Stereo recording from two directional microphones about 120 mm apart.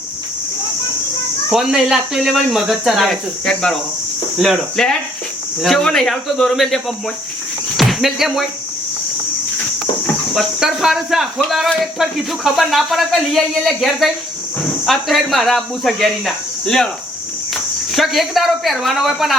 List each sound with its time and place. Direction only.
1.5 s speech: 5° right (ahead or behind)
7.8 s speech: centre (ahead or behind)
10.3 s speech: centre (ahead or behind)